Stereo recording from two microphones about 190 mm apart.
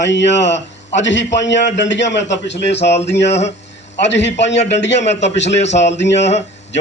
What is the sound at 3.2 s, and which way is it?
Speech, 35° left (ahead or behind).